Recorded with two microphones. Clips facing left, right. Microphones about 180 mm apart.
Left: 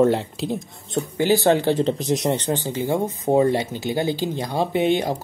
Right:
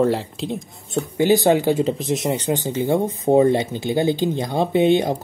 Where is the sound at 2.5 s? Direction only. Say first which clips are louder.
Right 3 dB; 20° right (ahead or behind).